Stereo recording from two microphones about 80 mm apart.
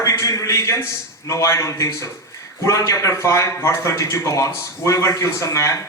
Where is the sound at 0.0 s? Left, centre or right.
Left.